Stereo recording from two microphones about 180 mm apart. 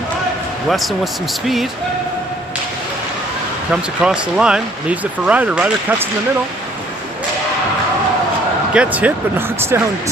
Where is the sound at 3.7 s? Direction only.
5° right (ahead or behind).